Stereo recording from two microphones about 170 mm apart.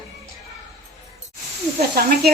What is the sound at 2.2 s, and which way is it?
Speech, 70° right (ahead or behind).